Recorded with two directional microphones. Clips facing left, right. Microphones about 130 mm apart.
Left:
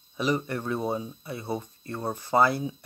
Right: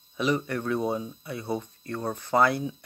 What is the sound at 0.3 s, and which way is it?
Speech, 10° left (ahead or behind).